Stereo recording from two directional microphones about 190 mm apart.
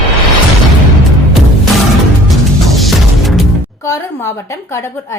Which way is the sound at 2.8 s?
Centre (ahead or behind).